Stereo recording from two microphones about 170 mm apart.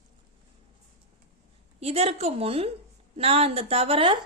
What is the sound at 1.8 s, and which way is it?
A woman's voice, 35° right (ahead or behind).